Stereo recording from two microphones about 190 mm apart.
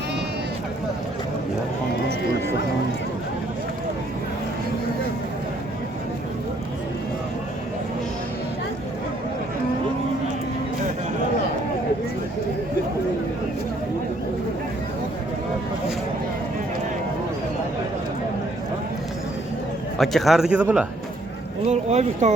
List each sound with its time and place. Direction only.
20.0 s speech: centre (ahead or behind)
21.7 s speech: 35° right (ahead or behind)